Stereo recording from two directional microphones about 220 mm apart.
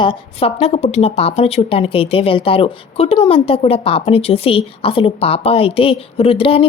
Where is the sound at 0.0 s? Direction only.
25° left (ahead or behind).